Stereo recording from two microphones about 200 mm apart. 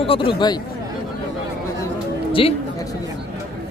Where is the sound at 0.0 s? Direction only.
25° left (ahead or behind).